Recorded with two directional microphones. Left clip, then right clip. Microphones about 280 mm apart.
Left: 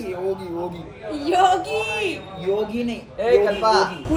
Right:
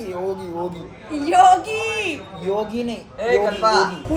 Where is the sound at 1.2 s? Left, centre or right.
Right.